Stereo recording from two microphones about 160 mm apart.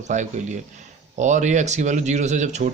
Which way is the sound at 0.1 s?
50° right (ahead or behind).